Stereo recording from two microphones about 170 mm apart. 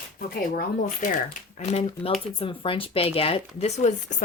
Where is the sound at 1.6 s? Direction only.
40° left (ahead or behind).